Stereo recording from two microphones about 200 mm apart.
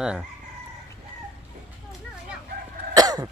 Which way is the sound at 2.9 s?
20° right (ahead or behind).